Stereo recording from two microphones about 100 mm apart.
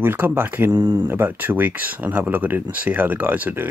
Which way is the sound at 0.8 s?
55° right (ahead or behind).